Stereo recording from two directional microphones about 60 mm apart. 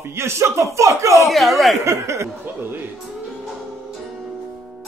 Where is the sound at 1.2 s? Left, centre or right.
Centre.